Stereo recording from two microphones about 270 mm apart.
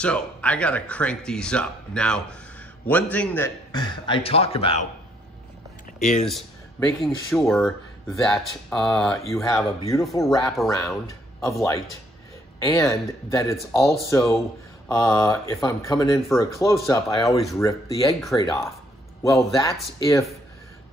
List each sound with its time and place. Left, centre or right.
0.0 s a man's voice: centre; by 4.8 s left
5.9 s speech: left
6.2 s a man's voice: centre